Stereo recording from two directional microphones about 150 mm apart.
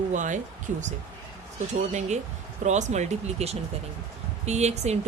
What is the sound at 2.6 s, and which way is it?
Speech, 50° right (ahead or behind).